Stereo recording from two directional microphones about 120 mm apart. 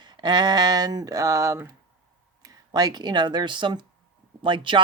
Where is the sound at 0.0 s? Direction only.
40° right (ahead or behind).